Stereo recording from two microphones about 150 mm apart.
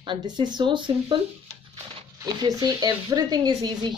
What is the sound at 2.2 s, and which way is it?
Speech, 25° right (ahead or behind).